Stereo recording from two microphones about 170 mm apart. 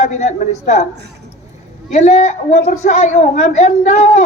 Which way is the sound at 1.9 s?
40° left (ahead or behind).